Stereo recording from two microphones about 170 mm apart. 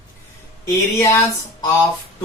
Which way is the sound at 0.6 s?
15° left (ahead or behind).